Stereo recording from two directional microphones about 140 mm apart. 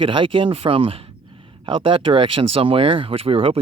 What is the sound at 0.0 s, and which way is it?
Speech, 35° right (ahead or behind).